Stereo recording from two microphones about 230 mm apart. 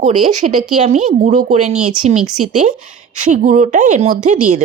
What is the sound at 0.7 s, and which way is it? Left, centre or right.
A woman's voice, right.